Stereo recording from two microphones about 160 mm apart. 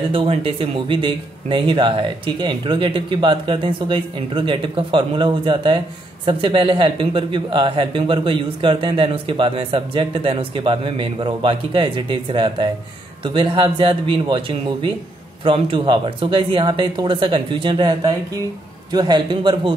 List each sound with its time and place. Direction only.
0.1 s speech: 35° right (ahead or behind)